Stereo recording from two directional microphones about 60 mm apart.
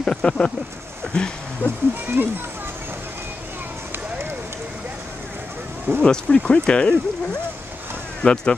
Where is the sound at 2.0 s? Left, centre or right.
Right.